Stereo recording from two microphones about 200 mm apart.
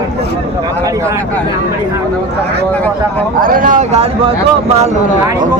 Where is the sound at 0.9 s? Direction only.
15° right (ahead or behind).